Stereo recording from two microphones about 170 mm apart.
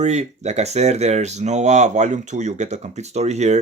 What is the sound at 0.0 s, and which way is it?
Speech, 40° right (ahead or behind).